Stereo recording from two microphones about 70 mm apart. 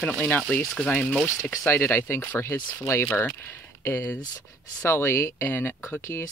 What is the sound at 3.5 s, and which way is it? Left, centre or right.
Speech, left.